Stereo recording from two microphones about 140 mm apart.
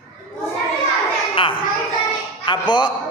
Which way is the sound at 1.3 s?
35° left (ahead or behind).